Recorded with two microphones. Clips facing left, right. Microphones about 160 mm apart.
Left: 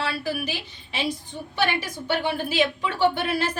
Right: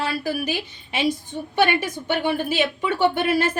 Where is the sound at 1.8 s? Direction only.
50° right (ahead or behind).